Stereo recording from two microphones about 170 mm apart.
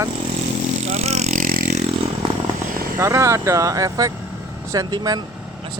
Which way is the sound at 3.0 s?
15° right (ahead or behind).